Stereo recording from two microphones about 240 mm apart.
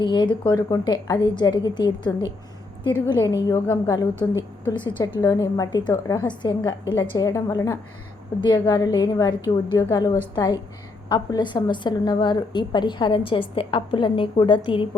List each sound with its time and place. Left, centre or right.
0.0 s a woman's voice: centre